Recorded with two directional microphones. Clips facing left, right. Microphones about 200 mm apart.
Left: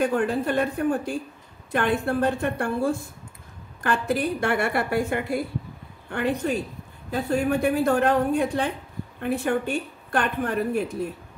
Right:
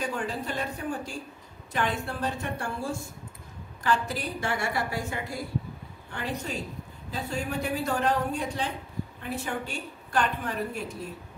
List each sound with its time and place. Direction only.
0.0 s a woman's voice: 55° left (ahead or behind)